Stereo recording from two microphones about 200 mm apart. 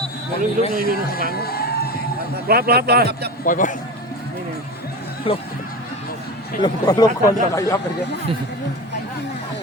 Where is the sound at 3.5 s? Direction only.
40° left (ahead or behind).